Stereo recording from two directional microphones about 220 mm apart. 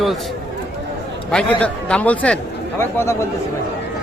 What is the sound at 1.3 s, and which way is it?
Speech, 5° left (ahead or behind).